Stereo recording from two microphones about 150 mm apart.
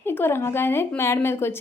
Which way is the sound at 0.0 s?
15° left (ahead or behind).